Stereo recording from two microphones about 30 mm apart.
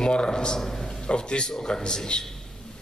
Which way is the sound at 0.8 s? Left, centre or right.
Left.